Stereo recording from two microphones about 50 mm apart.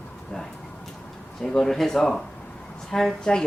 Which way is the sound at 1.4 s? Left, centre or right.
Centre.